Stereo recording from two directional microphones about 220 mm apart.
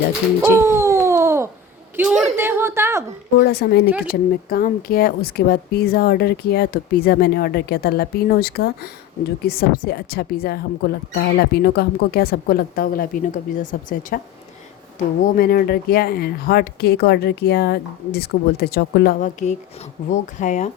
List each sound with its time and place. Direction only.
0.5 s a sound: 10° right (ahead or behind)
2.0 s a man's voice: 10° right (ahead or behind)
3.3 s speech: 45° left (ahead or behind)
3.8 s speech: 5° right (ahead or behind)
4.4 s speech: 40° left (ahead or behind)
19.2 s speech: 35° left (ahead or behind)